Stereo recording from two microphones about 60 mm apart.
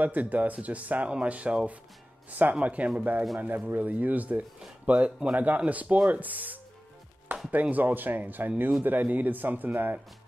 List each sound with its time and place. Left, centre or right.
0.0 s speech: right